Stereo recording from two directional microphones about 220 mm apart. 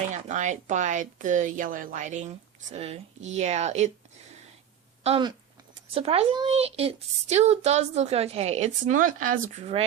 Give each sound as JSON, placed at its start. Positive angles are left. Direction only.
{"t": 0.1, "sound": "a woman's voice", "side_deg": -35}
{"t": 5.0, "sound": "a woman's voice", "side_deg": -25}